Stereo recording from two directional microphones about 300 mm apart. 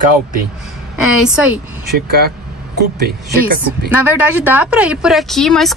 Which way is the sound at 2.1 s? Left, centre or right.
Right.